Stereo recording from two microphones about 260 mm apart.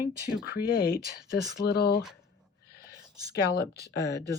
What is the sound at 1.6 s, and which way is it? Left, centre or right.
Speech, left.